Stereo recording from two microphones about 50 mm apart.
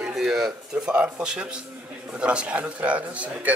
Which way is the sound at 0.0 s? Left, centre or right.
Centre.